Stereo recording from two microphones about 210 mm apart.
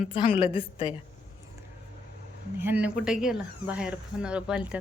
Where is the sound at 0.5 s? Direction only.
25° left (ahead or behind).